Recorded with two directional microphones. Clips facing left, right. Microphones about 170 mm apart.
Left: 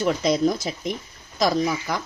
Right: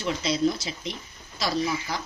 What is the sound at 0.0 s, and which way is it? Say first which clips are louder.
A woman's voice: left 5 dB; 50° left (ahead or behind).